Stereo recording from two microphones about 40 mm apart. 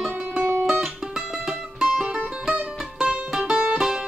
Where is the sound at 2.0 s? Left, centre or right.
Centre.